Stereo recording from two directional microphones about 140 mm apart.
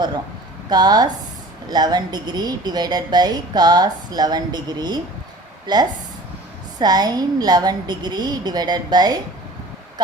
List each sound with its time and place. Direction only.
0.7 s a woman's voice: 30° right (ahead or behind)